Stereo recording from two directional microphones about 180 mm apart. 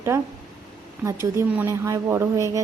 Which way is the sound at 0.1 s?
15° right (ahead or behind).